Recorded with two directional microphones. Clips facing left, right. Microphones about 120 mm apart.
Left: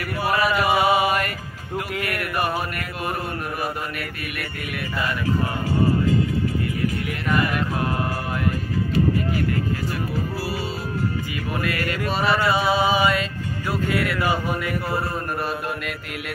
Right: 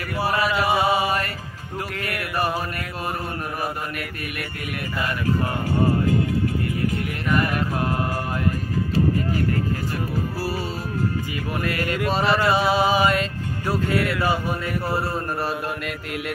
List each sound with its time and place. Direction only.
0.2 s chant: 30° right (ahead or behind)
0.7 s mantra: 30° right (ahead or behind)
2.0 s music: 25° right (ahead or behind)
11.6 s a sound: 25° right (ahead or behind)
12.1 s music: 35° right (ahead or behind)